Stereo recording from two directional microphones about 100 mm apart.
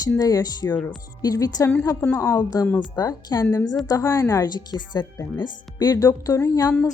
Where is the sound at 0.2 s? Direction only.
40° left (ahead or behind).